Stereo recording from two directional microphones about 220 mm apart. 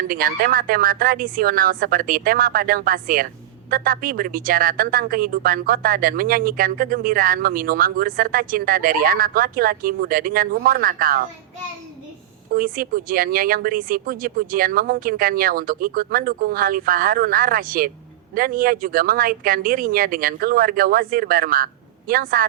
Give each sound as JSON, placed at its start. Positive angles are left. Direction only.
{"t": 0.1, "sound": "speech", "side_deg": -40}
{"t": 12.5, "sound": "speech", "side_deg": -40}